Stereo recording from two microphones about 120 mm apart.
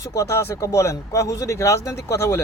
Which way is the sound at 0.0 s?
25° left (ahead or behind).